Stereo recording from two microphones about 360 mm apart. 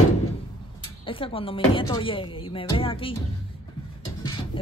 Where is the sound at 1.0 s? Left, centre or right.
Centre.